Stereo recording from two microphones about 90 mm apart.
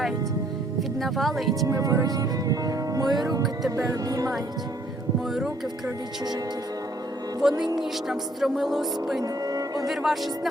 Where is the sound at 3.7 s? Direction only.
40° right (ahead or behind).